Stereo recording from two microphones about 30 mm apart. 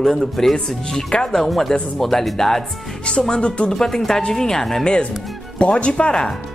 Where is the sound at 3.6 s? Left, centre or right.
Centre.